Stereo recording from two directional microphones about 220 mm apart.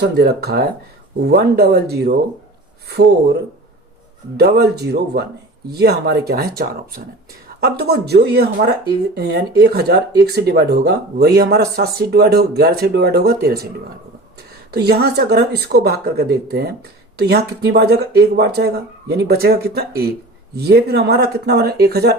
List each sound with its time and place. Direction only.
0.2 s speech: 45° right (ahead or behind)
4.4 s speech: 45° right (ahead or behind)
14.7 s speech: 45° right (ahead or behind)